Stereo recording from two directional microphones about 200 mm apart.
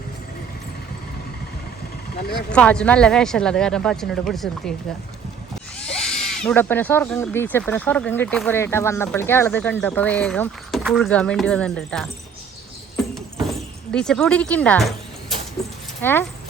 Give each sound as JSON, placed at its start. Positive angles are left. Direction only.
{"t": 2.1, "sound": "speech", "side_deg": 50}
{"t": 2.5, "sound": "speech", "side_deg": 5}
{"t": 5.9, "sound": "speech", "side_deg": 5}
{"t": 13.1, "sound": "a sound", "side_deg": 5}
{"t": 16.0, "sound": "speech", "side_deg": 10}